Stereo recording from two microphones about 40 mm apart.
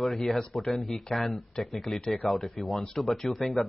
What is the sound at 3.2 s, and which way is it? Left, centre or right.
Speech, left.